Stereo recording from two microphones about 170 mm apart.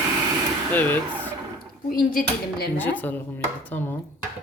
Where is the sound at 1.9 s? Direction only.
55° left (ahead or behind).